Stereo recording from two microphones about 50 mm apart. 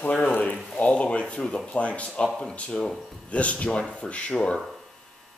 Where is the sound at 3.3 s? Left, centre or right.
Left.